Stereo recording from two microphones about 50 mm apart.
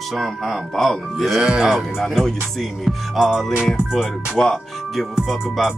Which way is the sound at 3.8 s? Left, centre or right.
Centre.